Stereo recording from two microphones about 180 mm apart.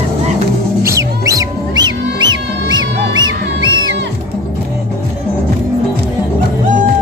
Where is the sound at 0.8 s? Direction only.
15° right (ahead or behind).